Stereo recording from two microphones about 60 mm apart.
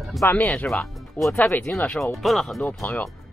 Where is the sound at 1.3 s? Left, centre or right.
Left.